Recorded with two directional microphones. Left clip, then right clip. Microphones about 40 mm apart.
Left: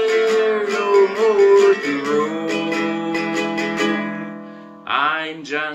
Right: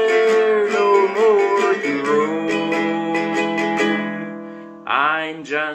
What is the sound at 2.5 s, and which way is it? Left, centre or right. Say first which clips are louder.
Music: right 1 dB; centre.